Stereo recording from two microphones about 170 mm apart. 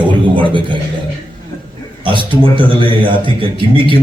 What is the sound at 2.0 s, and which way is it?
A man's voice, 30° right (ahead or behind).